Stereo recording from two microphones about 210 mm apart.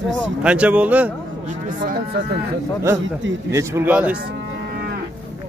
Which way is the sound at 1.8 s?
45° right (ahead or behind).